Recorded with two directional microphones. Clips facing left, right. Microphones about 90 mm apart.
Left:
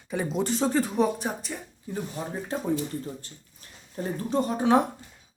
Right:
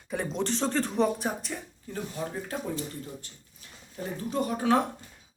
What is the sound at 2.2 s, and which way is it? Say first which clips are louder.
Speech: even; 25° left (ahead or behind).